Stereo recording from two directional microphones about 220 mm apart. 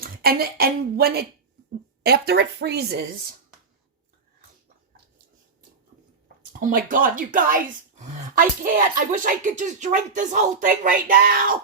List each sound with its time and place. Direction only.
0.0 s a woman's voice: 45° right (ahead or behind)
6.2 s speech: 40° right (ahead or behind)